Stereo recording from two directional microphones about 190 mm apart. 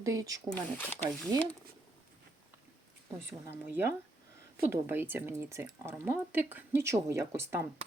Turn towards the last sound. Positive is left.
turn(degrees=-15)  # may be behind; listen again after turning